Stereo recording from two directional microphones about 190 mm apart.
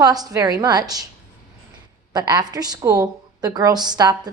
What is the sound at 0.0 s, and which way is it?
A woman's voice, 20° right (ahead or behind).